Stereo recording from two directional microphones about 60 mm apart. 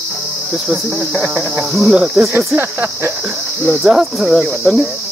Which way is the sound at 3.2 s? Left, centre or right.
Right.